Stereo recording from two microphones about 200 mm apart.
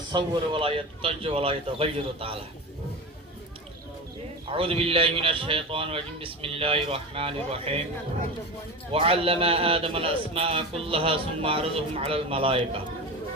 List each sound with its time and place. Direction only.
0.1 s a man's voice: 20° right (ahead or behind)
4.4 s a man's voice: 25° right (ahead or behind)
8.9 s a man's voice: 30° right (ahead or behind)